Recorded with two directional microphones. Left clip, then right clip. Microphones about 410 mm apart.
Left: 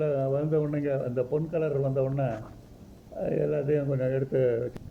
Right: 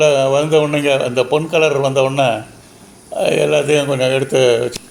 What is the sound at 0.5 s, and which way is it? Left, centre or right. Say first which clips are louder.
A man's voice: right 15 dB; left.